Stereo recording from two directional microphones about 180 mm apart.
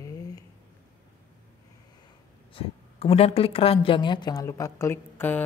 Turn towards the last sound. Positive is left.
turn(degrees=10)  # may be behind; listen again after turning